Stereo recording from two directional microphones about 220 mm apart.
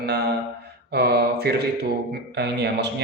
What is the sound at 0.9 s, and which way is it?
A man's voice, 50° right (ahead or behind).